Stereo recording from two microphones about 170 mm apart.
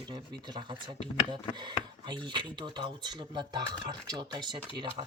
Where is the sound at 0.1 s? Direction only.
25° right (ahead or behind).